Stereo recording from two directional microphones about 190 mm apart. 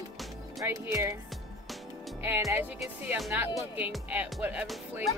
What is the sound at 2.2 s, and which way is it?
Speech, 15° right (ahead or behind).